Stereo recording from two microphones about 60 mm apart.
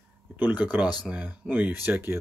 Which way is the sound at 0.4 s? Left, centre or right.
Right.